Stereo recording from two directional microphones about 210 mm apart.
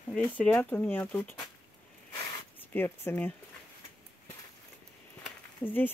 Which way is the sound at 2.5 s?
10° left (ahead or behind).